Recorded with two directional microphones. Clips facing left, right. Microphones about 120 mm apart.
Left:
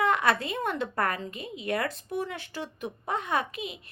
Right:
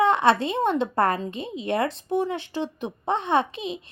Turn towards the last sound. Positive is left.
turn(degrees=-25)  # may be behind; listen again after turning